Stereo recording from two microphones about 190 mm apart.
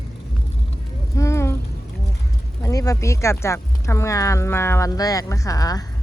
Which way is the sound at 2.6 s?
20° left (ahead or behind).